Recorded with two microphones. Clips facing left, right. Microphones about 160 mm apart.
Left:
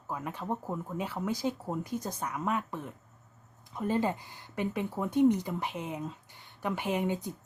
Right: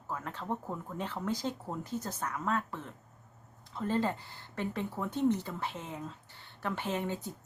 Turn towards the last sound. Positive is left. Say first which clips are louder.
# left 4 dB
turn(degrees=15)  # may be behind; listen again after turning